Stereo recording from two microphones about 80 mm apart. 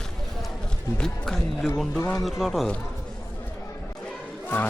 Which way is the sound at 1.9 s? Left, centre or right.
Left.